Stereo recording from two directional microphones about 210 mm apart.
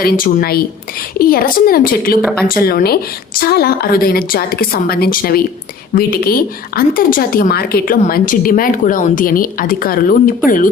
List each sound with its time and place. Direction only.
0.0 s a woman's voice: 40° left (ahead or behind)